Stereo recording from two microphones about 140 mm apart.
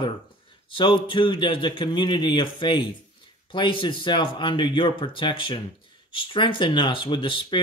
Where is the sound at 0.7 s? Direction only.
35° left (ahead or behind).